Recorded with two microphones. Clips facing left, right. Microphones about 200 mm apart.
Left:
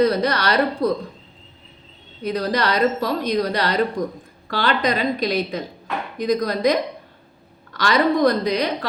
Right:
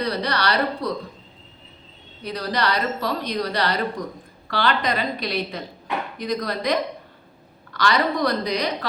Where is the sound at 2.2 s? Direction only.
45° left (ahead or behind).